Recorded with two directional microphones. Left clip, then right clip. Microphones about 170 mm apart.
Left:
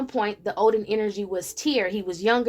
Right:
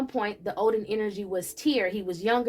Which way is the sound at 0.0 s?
40° left (ahead or behind).